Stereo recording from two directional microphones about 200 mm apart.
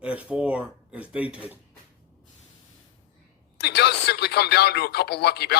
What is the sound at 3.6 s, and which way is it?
Speech, 55° left (ahead or behind).